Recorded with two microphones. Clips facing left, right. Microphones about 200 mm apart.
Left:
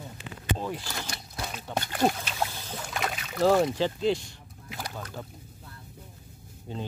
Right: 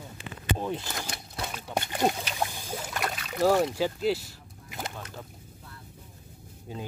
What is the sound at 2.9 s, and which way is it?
Boat, 5° left (ahead or behind).